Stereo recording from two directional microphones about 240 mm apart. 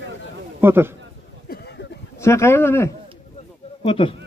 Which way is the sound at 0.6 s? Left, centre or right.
Centre.